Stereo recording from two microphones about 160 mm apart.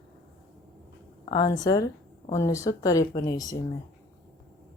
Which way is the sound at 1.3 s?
25° left (ahead or behind).